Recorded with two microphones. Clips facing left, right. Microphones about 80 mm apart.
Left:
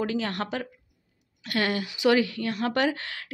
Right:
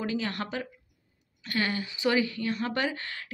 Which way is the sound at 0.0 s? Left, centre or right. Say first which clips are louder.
Left 3 dB; left.